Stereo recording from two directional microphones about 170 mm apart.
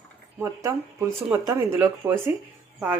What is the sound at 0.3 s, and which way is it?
Speech, 15° right (ahead or behind).